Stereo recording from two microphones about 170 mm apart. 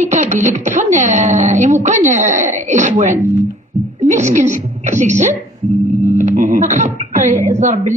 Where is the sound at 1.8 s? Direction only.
45° right (ahead or behind).